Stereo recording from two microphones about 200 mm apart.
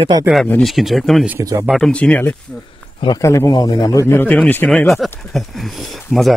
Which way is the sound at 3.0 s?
20° left (ahead or behind).